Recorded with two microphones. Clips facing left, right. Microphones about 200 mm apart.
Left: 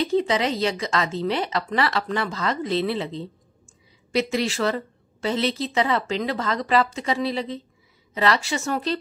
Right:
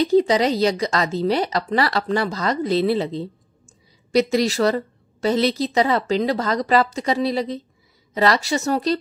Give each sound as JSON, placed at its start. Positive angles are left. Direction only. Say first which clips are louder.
{"t": 0.0, "sound": "a woman's voice", "louder": "right 5 dB", "side_deg": -35}